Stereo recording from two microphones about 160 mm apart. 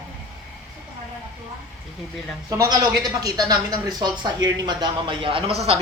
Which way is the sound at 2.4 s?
20° right (ahead or behind).